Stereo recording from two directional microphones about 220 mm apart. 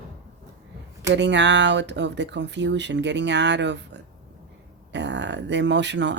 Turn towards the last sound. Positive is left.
turn(degrees=-55)  # may be behind; listen again after turning